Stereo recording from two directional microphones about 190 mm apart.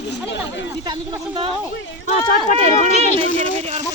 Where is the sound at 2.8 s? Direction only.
30° right (ahead or behind).